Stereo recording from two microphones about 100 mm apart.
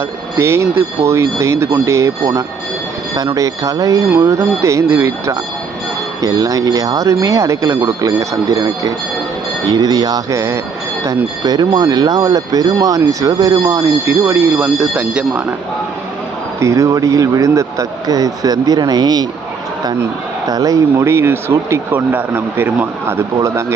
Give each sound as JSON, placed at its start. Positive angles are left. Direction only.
{"t": 0.3, "sound": "speech", "side_deg": -30}
{"t": 6.2, "sound": "speech", "side_deg": -35}
{"t": 10.3, "sound": "speech", "side_deg": -25}
{"t": 11.0, "sound": "speech", "side_deg": -40}
{"t": 14.8, "sound": "speech", "side_deg": -10}
{"t": 16.6, "sound": "speech", "side_deg": -30}
{"t": 20.5, "sound": "speech", "side_deg": -35}